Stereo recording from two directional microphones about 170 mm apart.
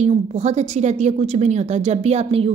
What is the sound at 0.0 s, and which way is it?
A woman's voice, 40° right (ahead or behind).